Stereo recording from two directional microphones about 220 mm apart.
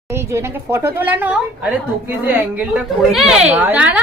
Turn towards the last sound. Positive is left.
turn(degrees=-5)  # may be behind; listen again after turning